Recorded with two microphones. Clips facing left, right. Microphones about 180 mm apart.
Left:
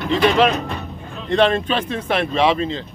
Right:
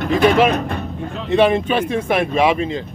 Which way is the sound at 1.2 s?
10° right (ahead or behind).